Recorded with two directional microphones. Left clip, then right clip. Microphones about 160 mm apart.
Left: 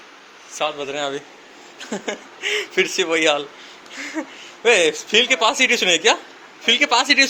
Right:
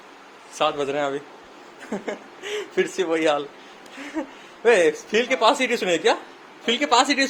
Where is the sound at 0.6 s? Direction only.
30° right (ahead or behind).